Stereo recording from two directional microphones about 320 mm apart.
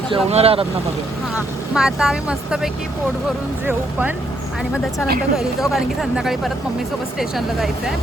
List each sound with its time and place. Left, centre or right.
0.1 s speech: centre
1.4 s speech: centre
5.4 s speech: centre